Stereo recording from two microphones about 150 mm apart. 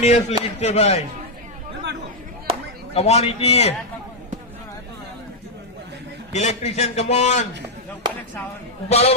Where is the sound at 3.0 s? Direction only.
45° left (ahead or behind).